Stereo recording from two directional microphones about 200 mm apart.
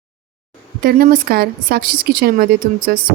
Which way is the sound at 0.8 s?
45° right (ahead or behind).